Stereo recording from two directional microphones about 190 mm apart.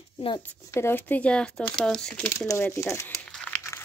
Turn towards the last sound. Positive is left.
turn(degrees=5)  # may be behind; listen again after turning